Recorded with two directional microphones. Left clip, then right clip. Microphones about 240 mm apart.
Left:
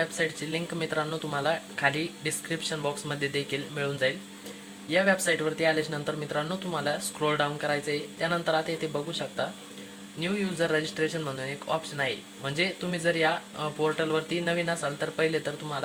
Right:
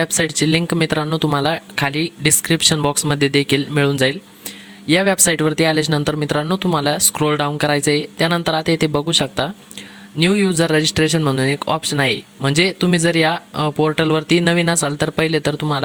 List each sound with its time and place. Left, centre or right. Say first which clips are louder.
0.5 s speech: right 12 dB; right
4.9 s speech: right 9 dB; right